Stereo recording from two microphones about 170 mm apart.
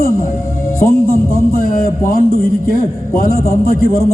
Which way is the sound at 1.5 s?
55° left (ahead or behind).